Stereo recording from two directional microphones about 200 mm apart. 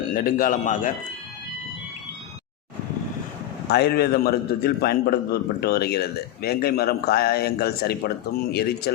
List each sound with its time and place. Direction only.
0.1 s a man's voice: 45° left (ahead or behind)
3.7 s a man's voice: 55° left (ahead or behind)